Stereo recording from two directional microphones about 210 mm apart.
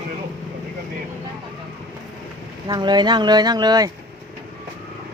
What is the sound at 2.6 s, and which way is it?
Speech, 20° right (ahead or behind).